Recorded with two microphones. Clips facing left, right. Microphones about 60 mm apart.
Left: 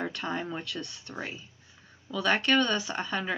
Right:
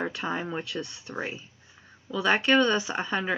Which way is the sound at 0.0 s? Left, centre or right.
Centre.